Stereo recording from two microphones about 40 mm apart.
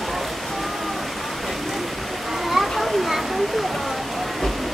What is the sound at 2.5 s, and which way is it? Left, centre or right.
Children playing, centre.